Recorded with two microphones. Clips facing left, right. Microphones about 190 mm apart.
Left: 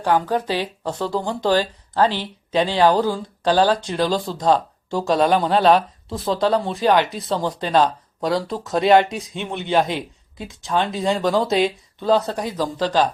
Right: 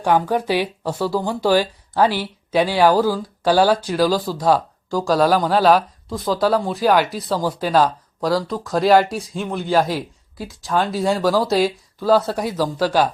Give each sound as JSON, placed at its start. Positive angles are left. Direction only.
{"t": 0.0, "sound": "speech", "side_deg": -15}
{"t": 8.4, "sound": "speech", "side_deg": 25}
{"t": 8.7, "sound": "speech", "side_deg": 0}